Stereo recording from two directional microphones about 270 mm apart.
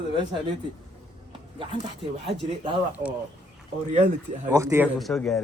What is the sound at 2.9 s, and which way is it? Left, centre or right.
Speech, centre.